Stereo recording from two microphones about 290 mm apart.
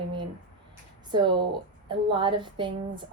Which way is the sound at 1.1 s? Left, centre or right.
Centre.